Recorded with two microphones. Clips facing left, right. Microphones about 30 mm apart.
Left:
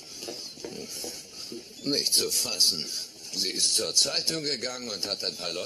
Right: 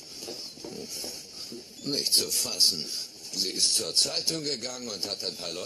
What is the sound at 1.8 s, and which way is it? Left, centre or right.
Speech, left.